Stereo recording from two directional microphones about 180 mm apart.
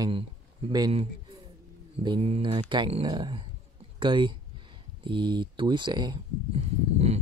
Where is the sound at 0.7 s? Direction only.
25° right (ahead or behind).